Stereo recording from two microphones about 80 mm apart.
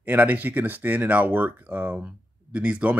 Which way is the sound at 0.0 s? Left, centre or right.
Right.